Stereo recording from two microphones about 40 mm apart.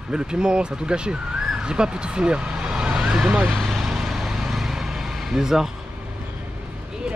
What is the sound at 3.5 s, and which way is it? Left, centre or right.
Vehicle, centre.